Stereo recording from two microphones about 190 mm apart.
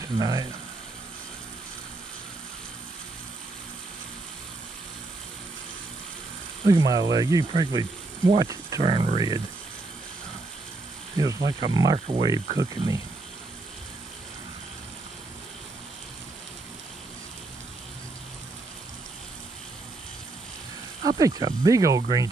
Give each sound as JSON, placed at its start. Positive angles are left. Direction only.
{"t": 0.2, "sound": "speech", "side_deg": -20}
{"t": 6.7, "sound": "speech", "side_deg": -20}
{"t": 11.1, "sound": "speech", "side_deg": -20}
{"t": 21.2, "sound": "speech", "side_deg": -20}